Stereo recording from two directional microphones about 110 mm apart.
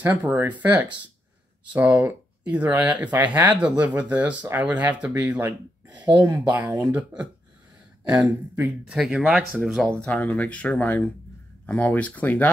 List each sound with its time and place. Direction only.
0.2 s speech: 20° right (ahead or behind); by 9.8 s centre (ahead or behind)
9.8 s speech: 10° left (ahead or behind)